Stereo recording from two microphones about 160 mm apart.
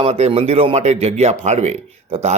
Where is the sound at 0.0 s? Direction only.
40° right (ahead or behind).